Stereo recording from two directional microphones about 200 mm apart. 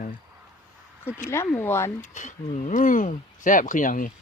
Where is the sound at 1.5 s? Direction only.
10° left (ahead or behind).